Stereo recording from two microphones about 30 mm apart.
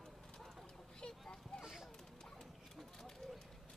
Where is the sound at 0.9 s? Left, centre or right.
Left.